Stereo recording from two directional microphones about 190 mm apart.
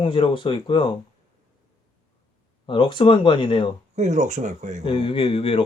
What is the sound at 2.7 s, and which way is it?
Speech, 25° left (ahead or behind).